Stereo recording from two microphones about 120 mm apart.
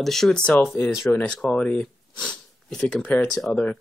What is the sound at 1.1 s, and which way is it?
Speech, 5° left (ahead or behind).